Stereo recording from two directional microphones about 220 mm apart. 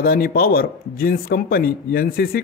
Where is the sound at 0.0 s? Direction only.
40° left (ahead or behind).